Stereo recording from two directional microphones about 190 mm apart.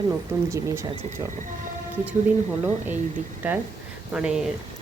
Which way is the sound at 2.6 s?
10° right (ahead or behind).